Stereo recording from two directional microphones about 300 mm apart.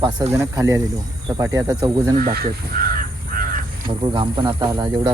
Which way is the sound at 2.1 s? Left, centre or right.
Right.